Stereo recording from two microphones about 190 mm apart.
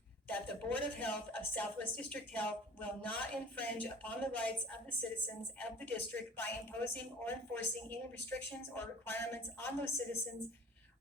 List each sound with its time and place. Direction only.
0.3 s a woman's voice: 10° left (ahead or behind)